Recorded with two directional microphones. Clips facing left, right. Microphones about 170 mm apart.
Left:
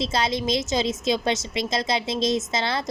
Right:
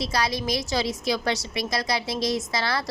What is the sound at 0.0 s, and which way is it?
A woman's voice, 25° left (ahead or behind).